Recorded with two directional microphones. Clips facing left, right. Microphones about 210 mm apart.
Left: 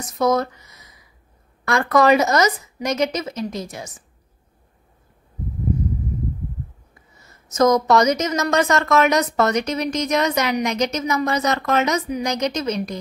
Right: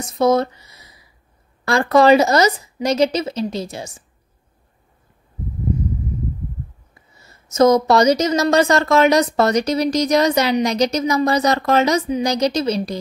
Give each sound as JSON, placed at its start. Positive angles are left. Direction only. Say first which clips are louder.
{"t": 0.0, "sound": "a woman's voice", "louder": "right 3 dB", "side_deg": -30}
{"t": 7.2, "sound": "a woman's voice", "louder": "right 3 dB", "side_deg": -30}